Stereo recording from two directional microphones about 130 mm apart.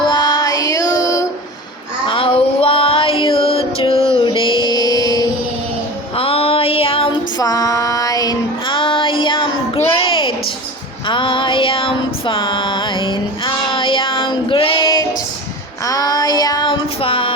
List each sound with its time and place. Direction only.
0.0 s music: 35° left (ahead or behind)
2.0 s music: 45° left (ahead or behind)
4.6 s mantra: 30° left (ahead or behind)
6.1 s female singing: 45° left (ahead or behind)
7.3 s child singing: 30° left (ahead or behind)
11.1 s female singing: 40° left (ahead or behind)
15.9 s child singing: 30° left (ahead or behind)
17.0 s music: 45° left (ahead or behind)